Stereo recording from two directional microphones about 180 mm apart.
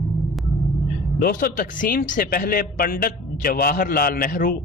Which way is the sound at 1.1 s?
55° left (ahead or behind).